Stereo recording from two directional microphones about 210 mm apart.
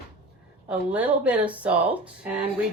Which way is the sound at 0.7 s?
5° right (ahead or behind).